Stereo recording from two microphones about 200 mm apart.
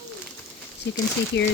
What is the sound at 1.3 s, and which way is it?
Speech, 60° left (ahead or behind).